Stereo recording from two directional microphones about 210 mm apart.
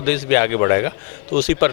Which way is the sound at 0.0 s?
15° left (ahead or behind).